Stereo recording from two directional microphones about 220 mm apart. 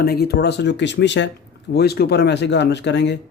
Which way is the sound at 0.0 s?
45° left (ahead or behind).